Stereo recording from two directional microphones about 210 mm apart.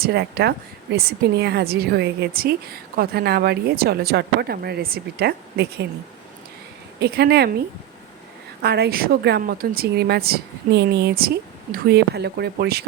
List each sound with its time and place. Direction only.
0.0 s a woman's voice: 50° right (ahead or behind)
7.0 s a woman's voice: 50° right (ahead or behind)
8.6 s a woman's voice: 50° right (ahead or behind)